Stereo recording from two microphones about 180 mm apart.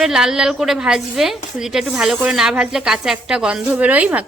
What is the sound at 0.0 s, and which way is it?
A woman's voice, 5° right (ahead or behind).